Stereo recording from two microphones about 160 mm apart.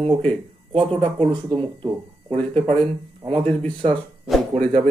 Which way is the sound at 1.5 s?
30° right (ahead or behind).